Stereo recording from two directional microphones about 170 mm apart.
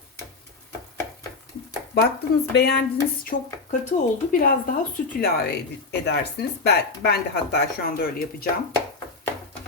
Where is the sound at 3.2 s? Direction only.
50° left (ahead or behind).